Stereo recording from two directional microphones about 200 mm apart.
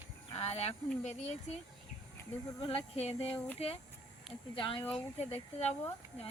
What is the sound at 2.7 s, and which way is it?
Speech, 30° left (ahead or behind).